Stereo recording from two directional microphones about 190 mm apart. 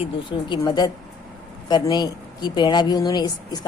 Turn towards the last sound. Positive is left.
turn(degrees=20)  # may be behind; listen again after turning